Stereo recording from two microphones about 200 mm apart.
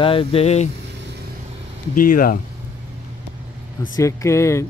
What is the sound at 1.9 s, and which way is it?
Speech, 45° left (ahead or behind).